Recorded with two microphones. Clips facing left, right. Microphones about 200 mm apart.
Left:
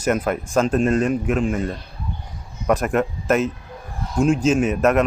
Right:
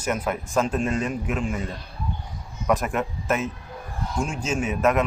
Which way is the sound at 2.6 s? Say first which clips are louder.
Left 4 dB; 50° left (ahead or behind).